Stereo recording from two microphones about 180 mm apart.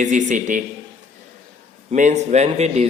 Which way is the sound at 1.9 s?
40° right (ahead or behind).